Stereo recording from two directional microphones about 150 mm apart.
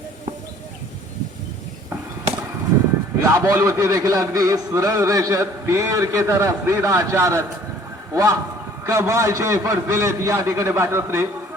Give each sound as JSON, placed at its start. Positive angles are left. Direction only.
{"t": 3.2, "sound": "a man's voice", "side_deg": -20}